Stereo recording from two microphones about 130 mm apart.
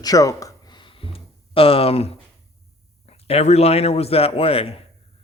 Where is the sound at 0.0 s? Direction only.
25° left (ahead or behind); by 2.1 s 50° left (ahead or behind).